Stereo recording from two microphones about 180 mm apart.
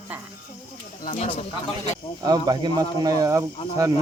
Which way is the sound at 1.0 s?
45° left (ahead or behind).